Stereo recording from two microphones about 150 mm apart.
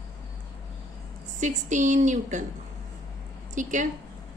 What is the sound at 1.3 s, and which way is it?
A woman's voice, 55° right (ahead or behind).